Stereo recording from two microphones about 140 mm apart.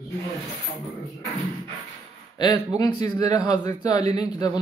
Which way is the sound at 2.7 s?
30° left (ahead or behind).